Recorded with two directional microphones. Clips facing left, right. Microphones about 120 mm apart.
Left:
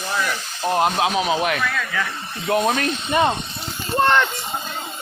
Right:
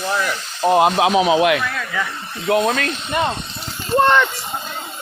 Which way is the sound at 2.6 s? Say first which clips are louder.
Right 1 dB; 10° left (ahead or behind).